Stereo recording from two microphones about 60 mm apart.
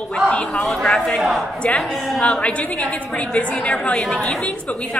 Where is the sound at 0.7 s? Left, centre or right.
Centre.